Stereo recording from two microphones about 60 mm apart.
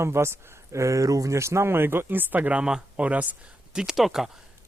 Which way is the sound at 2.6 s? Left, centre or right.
Centre.